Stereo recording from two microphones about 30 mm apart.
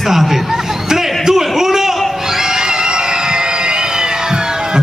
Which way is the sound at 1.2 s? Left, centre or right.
Centre.